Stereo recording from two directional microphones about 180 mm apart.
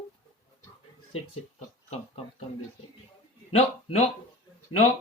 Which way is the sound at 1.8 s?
35° left (ahead or behind).